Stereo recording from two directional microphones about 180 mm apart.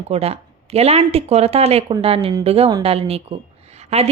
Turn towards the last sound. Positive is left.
turn(degrees=-35)  # may be behind; listen again after turning